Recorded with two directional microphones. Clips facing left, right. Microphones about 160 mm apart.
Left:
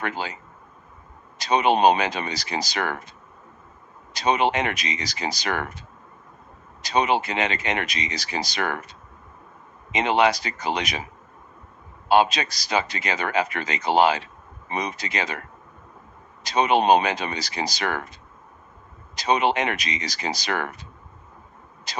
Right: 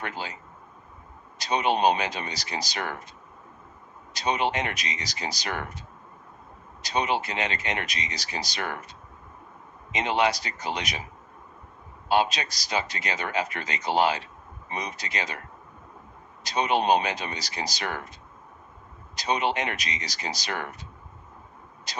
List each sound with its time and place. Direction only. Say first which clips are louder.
0.0 s a man's voice: left 5 dB; 90° left
1.4 s a man's voice: left 5 dB; 90° left
4.1 s a man's voice: left 5 dB; 90° left
6.8 s a man's voice: left 5 dB; 90° left
9.9 s a man's voice: left 4 dB; 90° left
12.0 s a man's voice: left 5 dB; 90° left
16.4 s a man's voice: left 5 dB; 90° left
19.1 s a man's voice: left 5 dB; 90° left
21.9 s a man's voice: left 5 dB; 90° left